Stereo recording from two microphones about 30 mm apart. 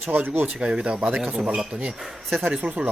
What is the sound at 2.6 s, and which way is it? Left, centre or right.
Speech, right.